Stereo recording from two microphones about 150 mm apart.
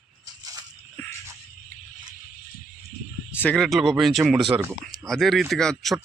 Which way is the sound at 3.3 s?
10° left (ahead or behind).